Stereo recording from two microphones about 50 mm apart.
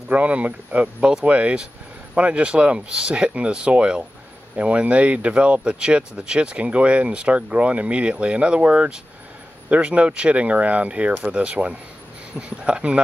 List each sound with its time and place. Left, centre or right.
0.1 s speech: right